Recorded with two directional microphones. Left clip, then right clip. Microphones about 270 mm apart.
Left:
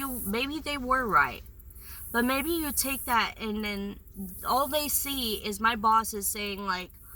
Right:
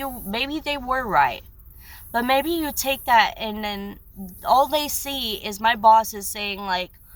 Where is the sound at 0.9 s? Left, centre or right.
Right.